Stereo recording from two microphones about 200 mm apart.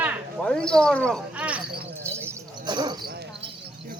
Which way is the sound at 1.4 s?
5° right (ahead or behind).